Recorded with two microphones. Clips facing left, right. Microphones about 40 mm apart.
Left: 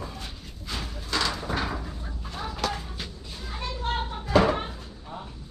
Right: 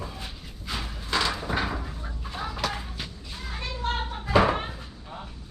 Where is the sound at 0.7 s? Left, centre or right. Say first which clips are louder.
Right 2 dB; centre.